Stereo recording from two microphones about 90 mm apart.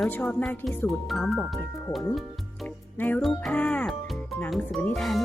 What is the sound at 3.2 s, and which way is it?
Speech, centre (ahead or behind).